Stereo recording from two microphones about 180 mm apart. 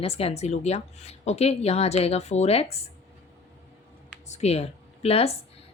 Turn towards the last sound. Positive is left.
turn(degrees=35)  # may be behind; listen again after turning